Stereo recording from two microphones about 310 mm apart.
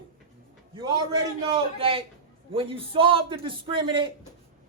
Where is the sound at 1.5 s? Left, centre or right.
Centre.